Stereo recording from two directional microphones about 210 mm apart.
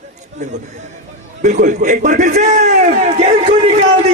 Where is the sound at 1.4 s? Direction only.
35° right (ahead or behind).